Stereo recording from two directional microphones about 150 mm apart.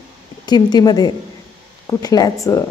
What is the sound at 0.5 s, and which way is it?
A woman's voice, 25° left (ahead or behind).